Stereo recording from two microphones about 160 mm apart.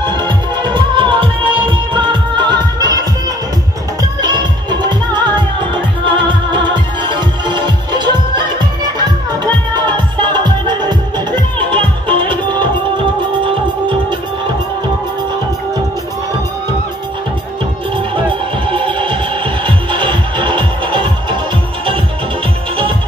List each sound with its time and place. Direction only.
0.0 s music: 30° right (ahead or behind)
18.7 s music: 30° right (ahead or behind)